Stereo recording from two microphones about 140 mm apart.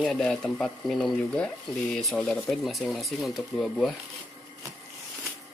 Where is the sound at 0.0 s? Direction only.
5° left (ahead or behind).